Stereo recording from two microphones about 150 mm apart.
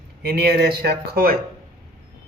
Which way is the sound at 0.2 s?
90° right.